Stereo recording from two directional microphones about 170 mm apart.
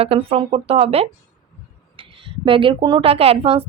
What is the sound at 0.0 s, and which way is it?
A woman's voice, 35° right (ahead or behind).